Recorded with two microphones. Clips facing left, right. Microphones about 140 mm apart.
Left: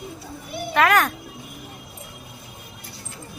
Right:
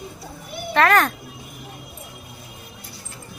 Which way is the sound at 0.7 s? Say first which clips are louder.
Right 1 dB; 5° left (ahead or behind).